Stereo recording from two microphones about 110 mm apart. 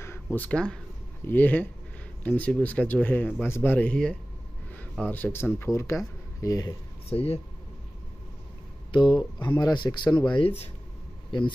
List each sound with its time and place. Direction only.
0.0 s a sound: 20° left (ahead or behind)
1.2 s speech: 15° left (ahead or behind); by 6.7 s 30° left (ahead or behind)
7.1 s speech: 65° left (ahead or behind)
8.9 s a man's voice: 50° left (ahead or behind)
11.3 s speech: 45° left (ahead or behind)